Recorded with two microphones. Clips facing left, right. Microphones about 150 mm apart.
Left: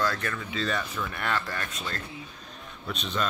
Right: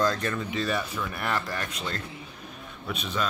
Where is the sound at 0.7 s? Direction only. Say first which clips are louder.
Right 1 dB; 10° right (ahead or behind).